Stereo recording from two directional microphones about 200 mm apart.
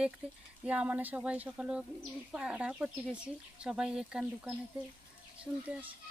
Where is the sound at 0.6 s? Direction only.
5° right (ahead or behind).